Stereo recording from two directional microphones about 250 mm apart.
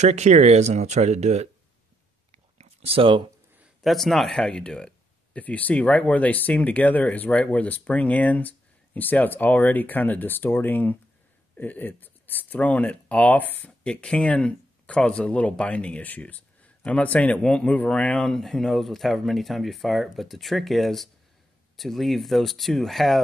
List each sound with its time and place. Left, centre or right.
0.0 s speech: right
2.3 s a sound: right
3.5 s speech: centre